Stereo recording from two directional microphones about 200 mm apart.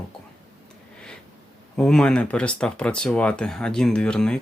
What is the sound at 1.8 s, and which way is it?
Speech, 5° left (ahead or behind).